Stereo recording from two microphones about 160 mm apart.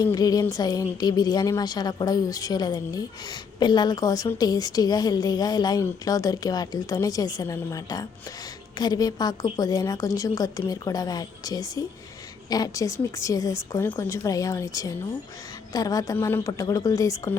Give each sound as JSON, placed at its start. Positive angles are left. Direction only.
{"t": 0.0, "sound": "a woman's voice", "side_deg": 25}